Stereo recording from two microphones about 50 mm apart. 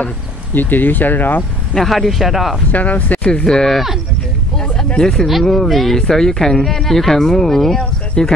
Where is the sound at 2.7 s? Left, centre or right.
Left.